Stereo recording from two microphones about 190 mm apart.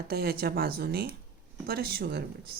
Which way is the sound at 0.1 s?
55° right (ahead or behind).